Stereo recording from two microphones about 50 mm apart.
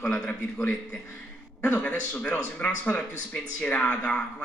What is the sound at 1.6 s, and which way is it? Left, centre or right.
A man's voice, left.